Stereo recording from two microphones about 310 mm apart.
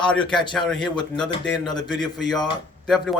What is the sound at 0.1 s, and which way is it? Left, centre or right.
Speech, centre.